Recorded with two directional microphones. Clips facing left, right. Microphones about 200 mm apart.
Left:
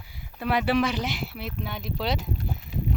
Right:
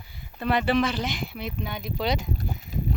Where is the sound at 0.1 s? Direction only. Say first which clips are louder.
Right 1 dB; 10° left (ahead or behind).